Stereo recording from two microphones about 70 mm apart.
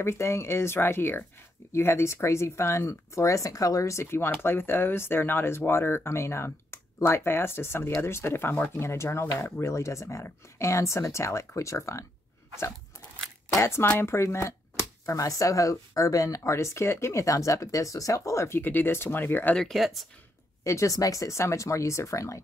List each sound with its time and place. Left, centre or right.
0.0 s speech: left
8.7 s speech: left
13.6 s speech: left
15.0 s speech: left
18.6 s speech: left
19.5 s speech: centre
20.6 s speech: left